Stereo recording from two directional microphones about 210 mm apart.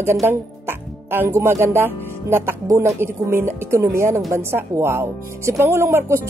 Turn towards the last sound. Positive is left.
turn(degrees=-10)  # may be behind; listen again after turning